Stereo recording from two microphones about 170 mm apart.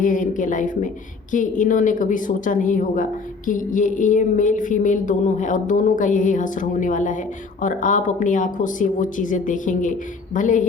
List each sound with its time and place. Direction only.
0.0 s a woman's voice: 50° left (ahead or behind)